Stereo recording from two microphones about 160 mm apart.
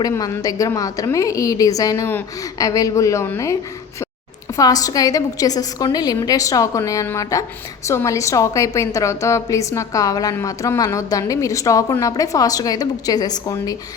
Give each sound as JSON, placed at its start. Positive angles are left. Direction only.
{"t": 0.0, "sound": "a woman's voice", "side_deg": 25}